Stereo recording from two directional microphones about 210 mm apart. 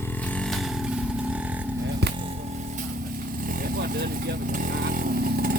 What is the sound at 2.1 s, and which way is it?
Vehicle, 30° right (ahead or behind).